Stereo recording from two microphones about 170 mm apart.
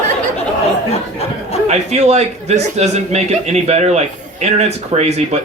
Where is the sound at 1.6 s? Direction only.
40° right (ahead or behind).